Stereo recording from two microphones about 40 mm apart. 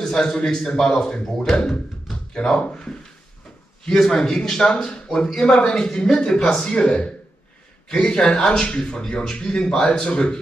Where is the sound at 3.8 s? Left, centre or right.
Centre.